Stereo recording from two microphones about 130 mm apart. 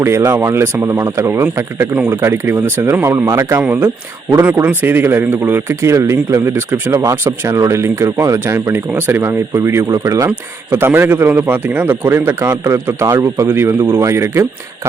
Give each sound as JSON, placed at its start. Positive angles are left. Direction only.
{"t": 0.0, "sound": "a man's voice", "side_deg": -20}